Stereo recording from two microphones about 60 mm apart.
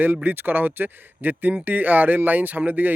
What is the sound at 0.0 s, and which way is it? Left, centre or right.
Speech, right.